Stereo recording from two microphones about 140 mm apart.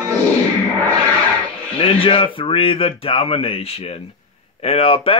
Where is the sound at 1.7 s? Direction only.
40° left (ahead or behind).